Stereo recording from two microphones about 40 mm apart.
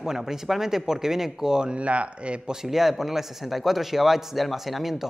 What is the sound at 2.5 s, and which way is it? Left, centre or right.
Speech, centre.